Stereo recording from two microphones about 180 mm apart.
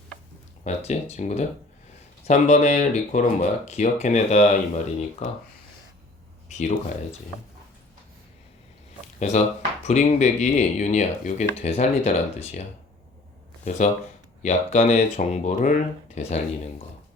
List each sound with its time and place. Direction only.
0.6 s speech: 35° left (ahead or behind)
6.6 s speech: 40° left (ahead or behind)
9.1 s speech: 40° left (ahead or behind)
13.7 s speech: 40° left (ahead or behind)